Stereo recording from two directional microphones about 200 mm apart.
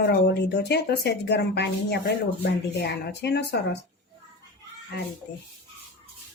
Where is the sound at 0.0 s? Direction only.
55° left (ahead or behind).